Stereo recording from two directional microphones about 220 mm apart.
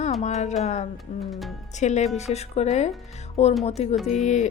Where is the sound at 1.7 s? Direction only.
30° left (ahead or behind).